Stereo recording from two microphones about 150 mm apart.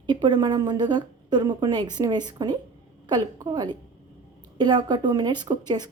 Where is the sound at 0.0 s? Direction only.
30° right (ahead or behind).